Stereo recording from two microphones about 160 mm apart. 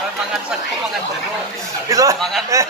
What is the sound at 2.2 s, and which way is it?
Speech, centre (ahead or behind).